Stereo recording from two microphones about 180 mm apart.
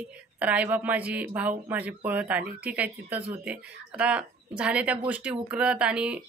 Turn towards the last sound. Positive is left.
turn(degrees=-5)  # may be behind; listen again after turning